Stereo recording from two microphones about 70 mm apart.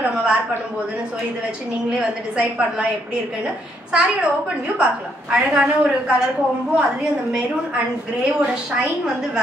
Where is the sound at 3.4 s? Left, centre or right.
Centre.